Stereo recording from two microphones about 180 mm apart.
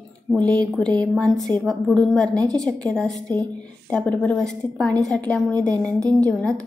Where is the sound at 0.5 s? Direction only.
5° left (ahead or behind).